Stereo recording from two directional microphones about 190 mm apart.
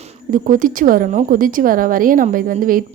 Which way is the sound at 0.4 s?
45° right (ahead or behind).